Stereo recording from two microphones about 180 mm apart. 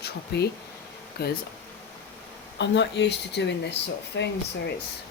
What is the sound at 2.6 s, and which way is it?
Speech, 80° left.